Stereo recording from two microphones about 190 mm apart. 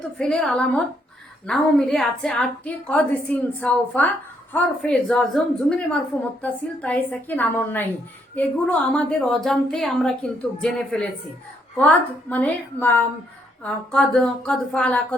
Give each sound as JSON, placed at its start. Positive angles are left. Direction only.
{"t": 0.2, "sound": "a woman's voice", "side_deg": 5}